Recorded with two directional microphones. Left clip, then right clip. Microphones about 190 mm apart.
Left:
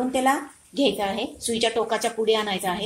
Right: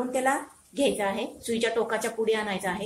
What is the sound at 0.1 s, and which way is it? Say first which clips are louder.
A woman's voice: left 3 dB; 30° left (ahead or behind).